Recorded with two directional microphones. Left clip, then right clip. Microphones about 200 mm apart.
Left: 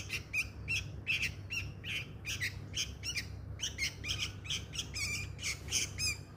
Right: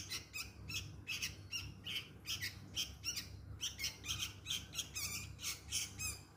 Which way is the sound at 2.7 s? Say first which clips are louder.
Left 1 dB; 60° right (ahead or behind).